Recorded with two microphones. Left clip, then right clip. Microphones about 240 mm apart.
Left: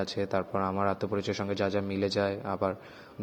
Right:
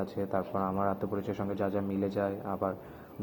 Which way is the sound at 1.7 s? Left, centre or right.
Left.